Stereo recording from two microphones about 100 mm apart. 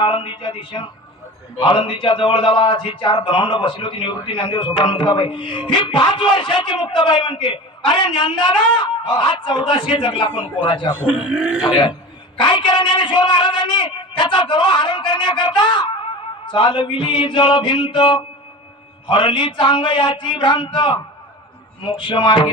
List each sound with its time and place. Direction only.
0.0 s a man's voice: 55° left (ahead or behind)
11.0 s a man's voice: 15° right (ahead or behind)
11.7 s a man's voice: 60° left (ahead or behind)